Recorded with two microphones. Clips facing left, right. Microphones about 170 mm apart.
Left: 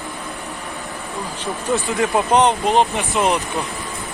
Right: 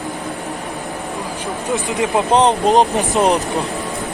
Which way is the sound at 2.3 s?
35° right (ahead or behind).